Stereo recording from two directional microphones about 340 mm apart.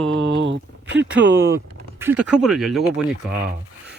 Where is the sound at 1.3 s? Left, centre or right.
Centre.